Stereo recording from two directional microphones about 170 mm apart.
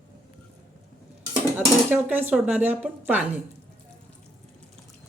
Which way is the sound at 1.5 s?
10° right (ahead or behind).